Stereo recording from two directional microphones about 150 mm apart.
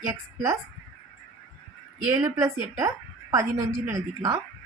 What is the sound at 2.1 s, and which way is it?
A woman's voice, 25° right (ahead or behind).